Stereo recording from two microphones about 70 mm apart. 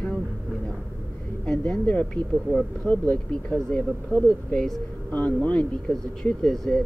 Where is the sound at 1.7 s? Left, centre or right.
Centre.